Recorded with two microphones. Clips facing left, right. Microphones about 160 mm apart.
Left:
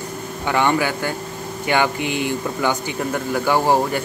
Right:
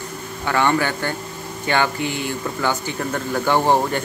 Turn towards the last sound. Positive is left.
turn(degrees=10)  # may be behind; listen again after turning